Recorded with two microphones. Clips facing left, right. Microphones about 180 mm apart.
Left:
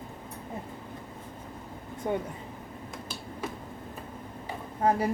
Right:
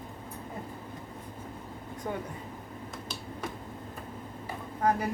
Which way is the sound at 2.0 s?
20° left (ahead or behind).